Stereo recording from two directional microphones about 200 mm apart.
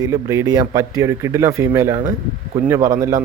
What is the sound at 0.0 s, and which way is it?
Speech, 15° right (ahead or behind).